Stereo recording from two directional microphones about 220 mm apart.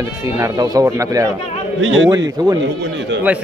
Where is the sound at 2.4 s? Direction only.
20° right (ahead or behind).